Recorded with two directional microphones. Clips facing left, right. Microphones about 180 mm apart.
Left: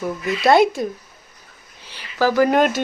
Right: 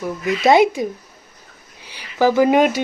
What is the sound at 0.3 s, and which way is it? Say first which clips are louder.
Speech: right 1 dB; 15° right (ahead or behind).